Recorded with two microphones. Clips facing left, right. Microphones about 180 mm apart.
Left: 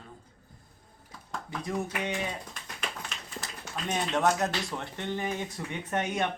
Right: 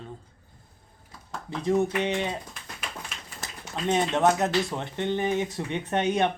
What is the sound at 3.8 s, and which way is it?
Speech, 20° right (ahead or behind).